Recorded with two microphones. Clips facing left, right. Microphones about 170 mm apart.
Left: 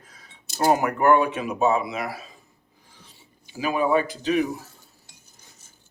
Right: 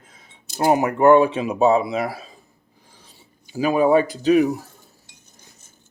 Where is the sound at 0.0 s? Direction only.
25° right (ahead or behind).